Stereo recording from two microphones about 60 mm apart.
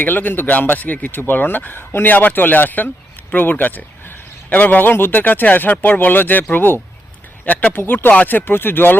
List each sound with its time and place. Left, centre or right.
0.0 s speech: left